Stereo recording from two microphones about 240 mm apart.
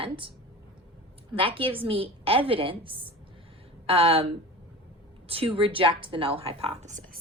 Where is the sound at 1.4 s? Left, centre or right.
Right.